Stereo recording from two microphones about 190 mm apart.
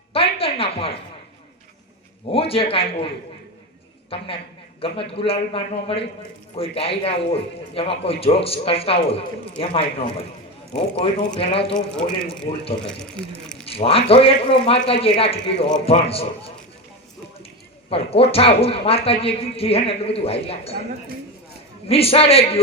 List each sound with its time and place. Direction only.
0.1 s a sound: 30° left (ahead or behind)
2.2 s a man's voice: 30° left (ahead or behind)
4.8 s a man's voice: 30° left (ahead or behind)
11.7 s speech: 5° left (ahead or behind)
13.7 s a man's voice: 30° left (ahead or behind)
17.8 s a man's voice: 30° left (ahead or behind)
21.8 s a man's voice: 30° left (ahead or behind)